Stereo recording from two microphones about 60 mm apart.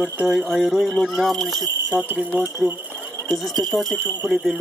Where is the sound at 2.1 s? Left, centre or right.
Right.